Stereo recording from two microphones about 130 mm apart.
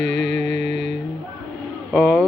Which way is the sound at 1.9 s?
Centre (ahead or behind).